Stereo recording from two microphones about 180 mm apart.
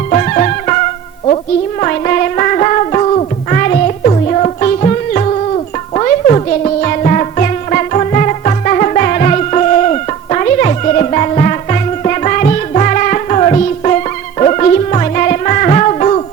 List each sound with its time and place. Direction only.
0.1 s music: 40° left (ahead or behind)
1.8 s music: 45° left (ahead or behind)